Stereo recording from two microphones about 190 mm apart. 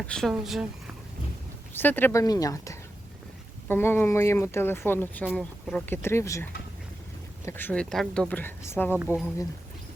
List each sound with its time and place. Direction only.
0.1 s speech: centre (ahead or behind)
1.7 s speech: 10° left (ahead or behind)
5.2 s speech: centre (ahead or behind)